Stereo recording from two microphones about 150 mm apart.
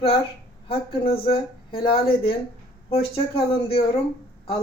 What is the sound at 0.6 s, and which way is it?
A woman's voice, 40° left (ahead or behind).